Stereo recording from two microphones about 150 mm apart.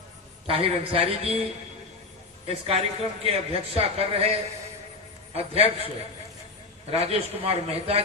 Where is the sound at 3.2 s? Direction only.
40° right (ahead or behind).